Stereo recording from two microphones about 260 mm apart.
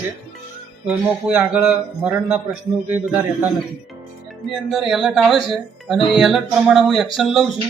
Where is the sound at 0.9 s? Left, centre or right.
Centre.